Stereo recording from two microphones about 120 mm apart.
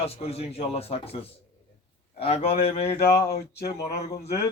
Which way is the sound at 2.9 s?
20° left (ahead or behind).